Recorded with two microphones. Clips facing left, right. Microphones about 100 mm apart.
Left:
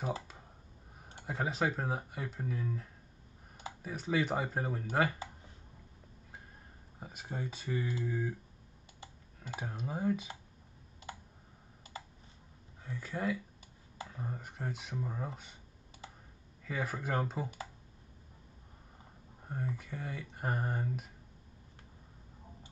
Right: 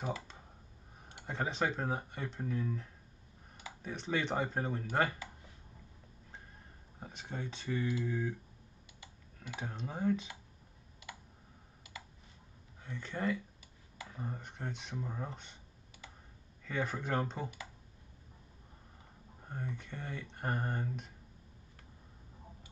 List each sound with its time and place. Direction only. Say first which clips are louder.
1.2 s speech: left 1 dB; 5° left (ahead or behind)
7.0 s speech: left 2 dB; 5° left (ahead or behind)
9.0 s computer keyboard: left 1 dB; 35° left (ahead or behind)
9.6 s speech: left 1 dB; 5° left (ahead or behind)
11.9 s computer keyboard: left 4 dB; 35° left (ahead or behind)
12.8 s speech: even; 5° left (ahead or behind)
16.6 s speech: even; 5° left (ahead or behind)
19.4 s speech: left 3 dB; 5° left (ahead or behind)